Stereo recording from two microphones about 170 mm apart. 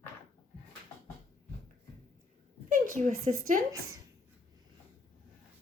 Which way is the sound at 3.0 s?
50° right (ahead or behind).